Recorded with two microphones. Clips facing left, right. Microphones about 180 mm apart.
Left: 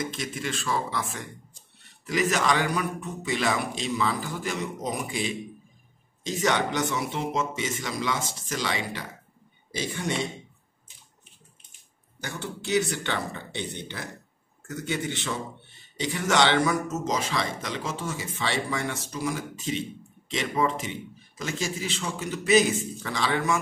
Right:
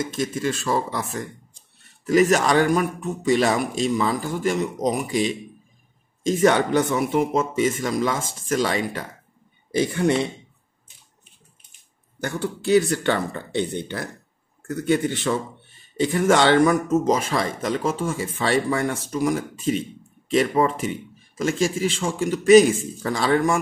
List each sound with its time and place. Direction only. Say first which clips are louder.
0.1 s speech: right 8 dB; 40° right (ahead or behind)
6.2 s speech: right 8 dB; 50° right (ahead or behind)
9.7 s speech: right 10 dB; 60° right (ahead or behind)
12.2 s speech: right 8 dB; 55° right (ahead or behind)